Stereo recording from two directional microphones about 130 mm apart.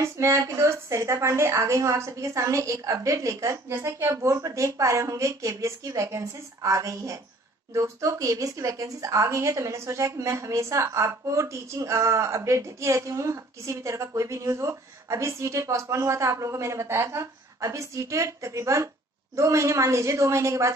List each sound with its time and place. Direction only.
0.0 s a woman's voice: 25° right (ahead or behind)